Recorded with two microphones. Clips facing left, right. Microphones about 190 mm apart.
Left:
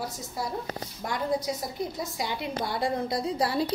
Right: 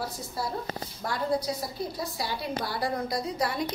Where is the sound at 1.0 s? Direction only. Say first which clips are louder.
Even; 20° left (ahead or behind).